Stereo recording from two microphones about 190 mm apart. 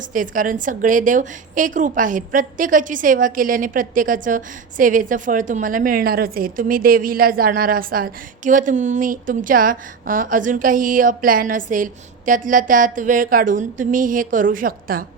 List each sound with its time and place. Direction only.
0.1 s a woman's voice: 45° right (ahead or behind)